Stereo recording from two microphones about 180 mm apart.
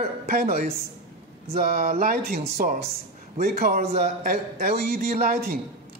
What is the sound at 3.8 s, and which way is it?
A man's voice, 40° right (ahead or behind).